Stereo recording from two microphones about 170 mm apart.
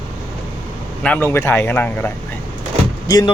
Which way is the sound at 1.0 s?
10° left (ahead or behind).